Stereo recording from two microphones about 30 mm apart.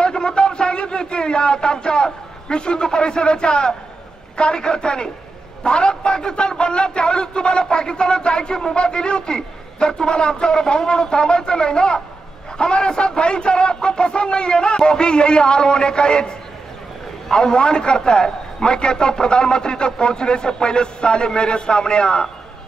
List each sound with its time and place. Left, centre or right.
0.0 s a sound: left
2.4 s speech: left
17.3 s speech: left